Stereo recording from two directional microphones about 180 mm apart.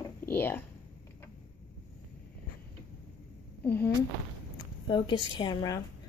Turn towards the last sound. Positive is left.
turn(degrees=20)  # may be behind; listen again after turning